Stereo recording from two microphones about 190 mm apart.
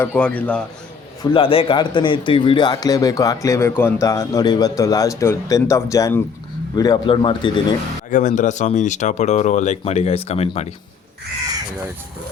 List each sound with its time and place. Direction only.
0.0 s a man's voice: 10° left (ahead or behind)
1.2 s a man's voice: 25° left (ahead or behind)
8.1 s speech: 40° left (ahead or behind)